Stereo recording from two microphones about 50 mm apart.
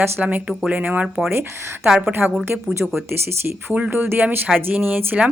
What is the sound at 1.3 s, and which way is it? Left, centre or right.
Speech, right.